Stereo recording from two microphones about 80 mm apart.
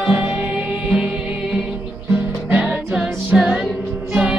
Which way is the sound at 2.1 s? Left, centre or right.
Centre.